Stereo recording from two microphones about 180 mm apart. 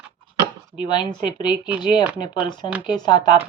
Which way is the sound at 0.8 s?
25° left (ahead or behind).